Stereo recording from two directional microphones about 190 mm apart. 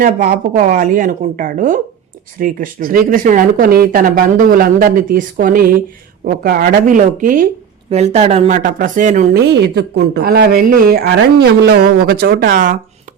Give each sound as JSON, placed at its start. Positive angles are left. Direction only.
{"t": 0.0, "sound": "speech", "side_deg": -50}
{"t": 7.9, "sound": "speech", "side_deg": -35}
{"t": 9.5, "sound": "speech", "side_deg": -60}